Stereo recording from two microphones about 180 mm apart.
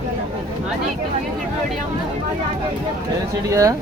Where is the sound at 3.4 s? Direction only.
20° right (ahead or behind).